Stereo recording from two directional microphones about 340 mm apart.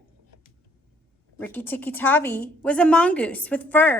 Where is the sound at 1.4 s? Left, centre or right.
Centre.